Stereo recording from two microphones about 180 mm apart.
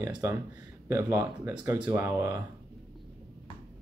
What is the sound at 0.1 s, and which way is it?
Speech, 15° right (ahead or behind).